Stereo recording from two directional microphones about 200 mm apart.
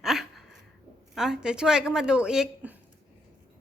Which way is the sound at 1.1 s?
Centre (ahead or behind).